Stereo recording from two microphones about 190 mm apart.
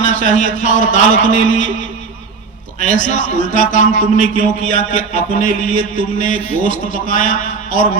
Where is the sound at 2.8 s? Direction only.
40° left (ahead or behind).